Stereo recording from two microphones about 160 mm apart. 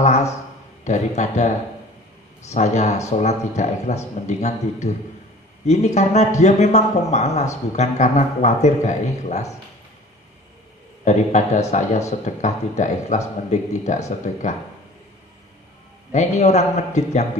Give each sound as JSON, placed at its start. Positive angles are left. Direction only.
{"t": 0.0, "sound": "a sound", "side_deg": 45}
{"t": 0.8, "sound": "speech", "side_deg": 45}
{"t": 11.1, "sound": "speech", "side_deg": 45}
{"t": 16.1, "sound": "speech", "side_deg": 45}